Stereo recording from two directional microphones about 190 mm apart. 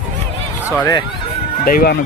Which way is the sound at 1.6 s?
50° left (ahead or behind).